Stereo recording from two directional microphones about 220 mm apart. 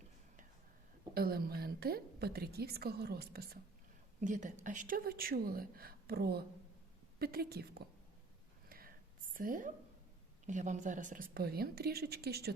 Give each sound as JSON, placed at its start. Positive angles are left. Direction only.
{"t": 1.1, "sound": "a woman's voice", "side_deg": -45}
{"t": 4.2, "sound": "a woman's voice", "side_deg": -35}
{"t": 8.7, "sound": "whispering", "side_deg": -40}
{"t": 10.4, "sound": "a woman's voice", "side_deg": -35}